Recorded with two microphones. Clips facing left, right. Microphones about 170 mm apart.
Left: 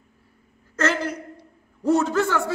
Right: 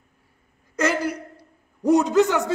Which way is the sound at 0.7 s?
10° right (ahead or behind).